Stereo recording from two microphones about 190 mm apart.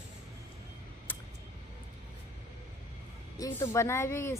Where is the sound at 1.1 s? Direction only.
10° left (ahead or behind).